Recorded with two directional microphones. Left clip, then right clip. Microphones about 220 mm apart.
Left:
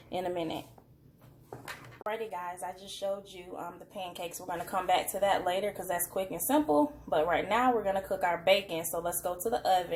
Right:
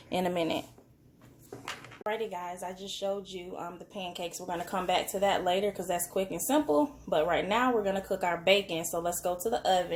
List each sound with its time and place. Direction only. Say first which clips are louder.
0.1 s speech: right 4 dB; 40° right (ahead or behind)
2.1 s speech: right 1 dB; 30° right (ahead or behind)